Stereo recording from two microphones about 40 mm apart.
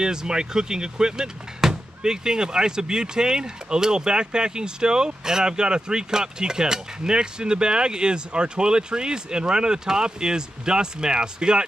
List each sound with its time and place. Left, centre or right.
0.0 s speech: centre